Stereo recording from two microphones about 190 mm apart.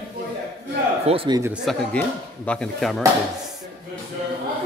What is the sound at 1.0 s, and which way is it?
Speech, 30° right (ahead or behind).